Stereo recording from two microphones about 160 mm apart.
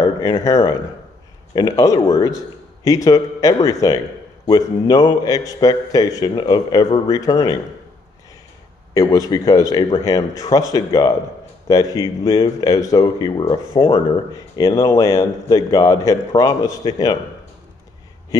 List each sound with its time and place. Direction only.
0.2 s speech: 20° left (ahead or behind)
8.9 s speech: 20° left (ahead or behind)
18.3 s speech: 20° left (ahead or behind)